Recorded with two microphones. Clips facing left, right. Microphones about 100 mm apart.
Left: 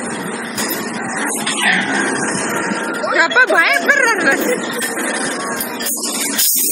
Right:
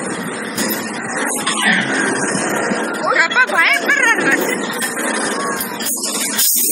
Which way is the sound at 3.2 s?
15° left (ahead or behind).